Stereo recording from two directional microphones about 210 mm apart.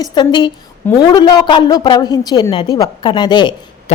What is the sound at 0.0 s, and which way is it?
A woman's voice, 20° left (ahead or behind).